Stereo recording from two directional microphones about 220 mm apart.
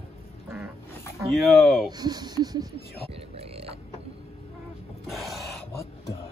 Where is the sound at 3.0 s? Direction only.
25° right (ahead or behind).